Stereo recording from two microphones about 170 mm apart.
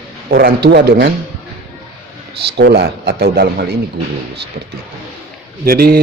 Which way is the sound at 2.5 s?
85° right.